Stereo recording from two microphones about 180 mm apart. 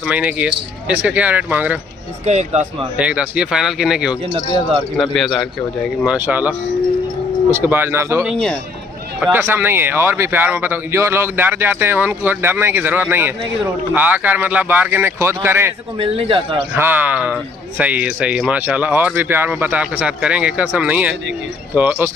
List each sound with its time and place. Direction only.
0.0 s speech: 5° right (ahead or behind)
2.2 s speech: 40° right (ahead or behind)
3.0 s speech: 5° right (ahead or behind)
4.3 s speech: 30° right (ahead or behind)
4.9 s speech: centre (ahead or behind)
6.1 s speech: 10° right (ahead or behind)
7.5 s speech: 10° right (ahead or behind)
8.2 s speech: centre (ahead or behind)
9.3 s speech: 10° right (ahead or behind)
16.0 s speech: 30° right (ahead or behind)
16.7 s speech: 10° right (ahead or behind)